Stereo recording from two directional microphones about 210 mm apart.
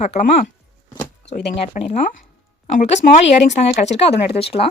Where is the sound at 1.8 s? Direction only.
40° left (ahead or behind).